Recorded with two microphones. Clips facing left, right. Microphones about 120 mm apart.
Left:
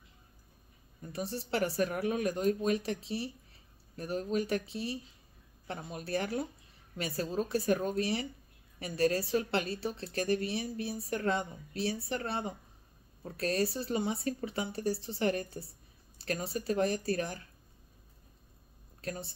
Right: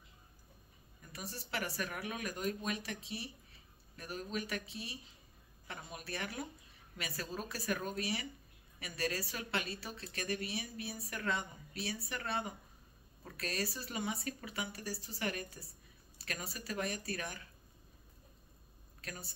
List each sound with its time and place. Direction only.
1.0 s a woman's voice: 30° left (ahead or behind)
18.9 s speech: 30° left (ahead or behind)